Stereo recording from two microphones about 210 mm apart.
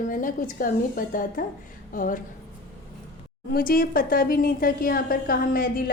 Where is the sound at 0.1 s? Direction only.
40° left (ahead or behind).